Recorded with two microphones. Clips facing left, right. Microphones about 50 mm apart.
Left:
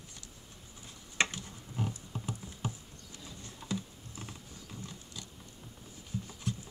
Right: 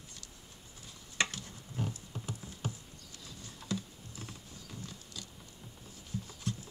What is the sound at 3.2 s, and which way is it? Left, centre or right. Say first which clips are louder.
Typing: left 2 dB; centre.